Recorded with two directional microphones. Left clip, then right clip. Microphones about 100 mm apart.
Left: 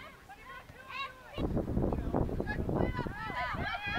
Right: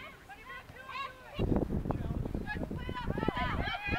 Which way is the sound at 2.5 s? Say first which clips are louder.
Left 5 dB; 5° left (ahead or behind).